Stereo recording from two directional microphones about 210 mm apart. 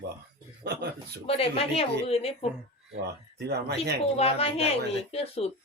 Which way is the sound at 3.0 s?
50° right (ahead or behind).